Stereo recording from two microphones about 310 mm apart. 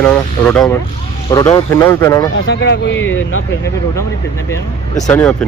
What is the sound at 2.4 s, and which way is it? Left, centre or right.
Speech, left.